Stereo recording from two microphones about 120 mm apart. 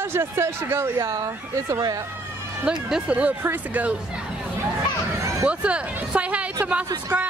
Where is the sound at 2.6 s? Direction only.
10° right (ahead or behind).